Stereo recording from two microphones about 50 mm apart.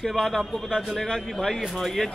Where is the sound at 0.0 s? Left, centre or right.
Centre.